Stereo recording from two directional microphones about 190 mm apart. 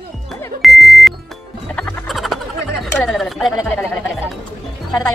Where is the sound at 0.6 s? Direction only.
Centre (ahead or behind).